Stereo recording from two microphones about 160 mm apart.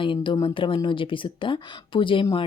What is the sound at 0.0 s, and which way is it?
Speech, 30° left (ahead or behind).